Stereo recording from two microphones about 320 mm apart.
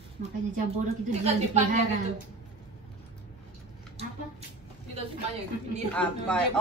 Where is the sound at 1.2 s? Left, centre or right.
Right.